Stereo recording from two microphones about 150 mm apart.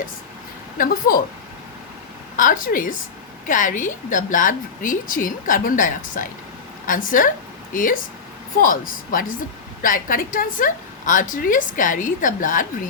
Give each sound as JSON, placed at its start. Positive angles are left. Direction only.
{"t": 0.8, "sound": "a woman's voice", "side_deg": 75}
{"t": 2.3, "sound": "a woman's voice", "side_deg": 65}